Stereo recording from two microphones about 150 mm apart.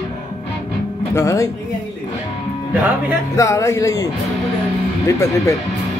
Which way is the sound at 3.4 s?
20° left (ahead or behind).